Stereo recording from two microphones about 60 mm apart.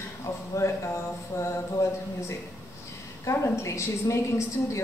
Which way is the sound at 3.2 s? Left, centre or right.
Left.